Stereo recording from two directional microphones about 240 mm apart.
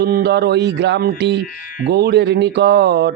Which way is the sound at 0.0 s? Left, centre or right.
Right.